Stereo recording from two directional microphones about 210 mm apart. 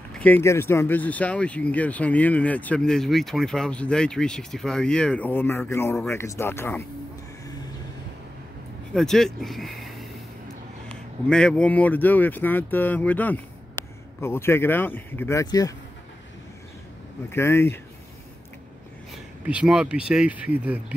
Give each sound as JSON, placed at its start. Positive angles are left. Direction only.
{"t": 0.2, "sound": "speech", "side_deg": 10}
{"t": 8.9, "sound": "speech", "side_deg": 0}
{"t": 11.2, "sound": "speech", "side_deg": 5}
{"t": 17.3, "sound": "speech", "side_deg": 10}
{"t": 19.4, "sound": "speech", "side_deg": -5}